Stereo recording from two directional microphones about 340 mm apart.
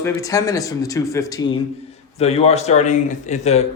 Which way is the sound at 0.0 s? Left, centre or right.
Centre.